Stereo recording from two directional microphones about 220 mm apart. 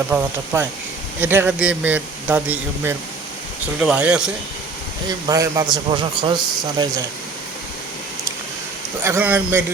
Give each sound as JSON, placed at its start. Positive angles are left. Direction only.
{"t": 0.1, "sound": "speech", "side_deg": -10}
{"t": 5.0, "sound": "speech", "side_deg": -15}
{"t": 9.0, "sound": "speech", "side_deg": -10}